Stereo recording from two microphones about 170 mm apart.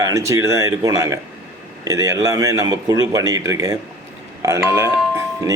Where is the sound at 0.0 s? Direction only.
20° right (ahead or behind).